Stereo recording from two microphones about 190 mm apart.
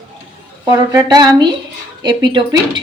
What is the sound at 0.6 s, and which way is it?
Speech, 20° right (ahead or behind).